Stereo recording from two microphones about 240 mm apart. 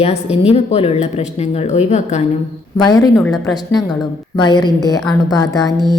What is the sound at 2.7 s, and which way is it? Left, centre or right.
Speech, centre.